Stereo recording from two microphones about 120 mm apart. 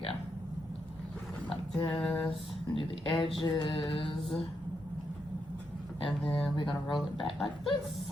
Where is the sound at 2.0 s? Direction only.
5° left (ahead or behind).